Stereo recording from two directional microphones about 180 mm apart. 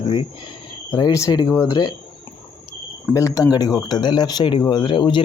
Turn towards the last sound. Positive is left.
turn(degrees=25)  # may be behind; listen again after turning